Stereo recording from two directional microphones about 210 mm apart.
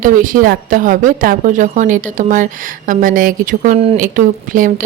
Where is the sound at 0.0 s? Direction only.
40° right (ahead or behind).